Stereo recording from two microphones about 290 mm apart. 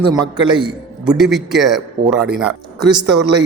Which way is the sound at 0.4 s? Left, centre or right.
Centre.